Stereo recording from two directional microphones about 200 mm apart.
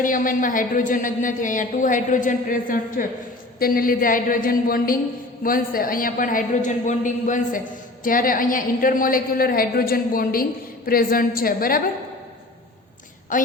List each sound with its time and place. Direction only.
0.0 s a woman's voice: 45° left (ahead or behind)
13.3 s a woman's voice: 40° left (ahead or behind)